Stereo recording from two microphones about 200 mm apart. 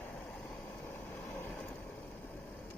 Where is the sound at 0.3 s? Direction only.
5° left (ahead or behind).